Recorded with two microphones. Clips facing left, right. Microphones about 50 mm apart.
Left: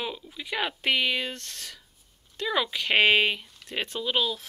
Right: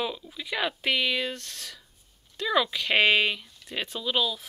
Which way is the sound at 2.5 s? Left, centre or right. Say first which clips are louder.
Right 1 dB; centre.